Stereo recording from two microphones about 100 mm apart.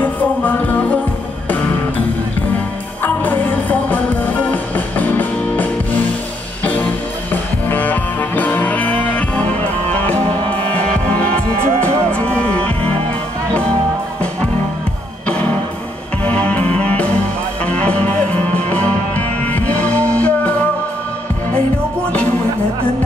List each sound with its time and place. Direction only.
0.0 s music: 15° left (ahead or behind)
3.0 s music: 20° left (ahead or behind)
11.1 s music: 10° left (ahead or behind)
16.3 s music: 15° left (ahead or behind)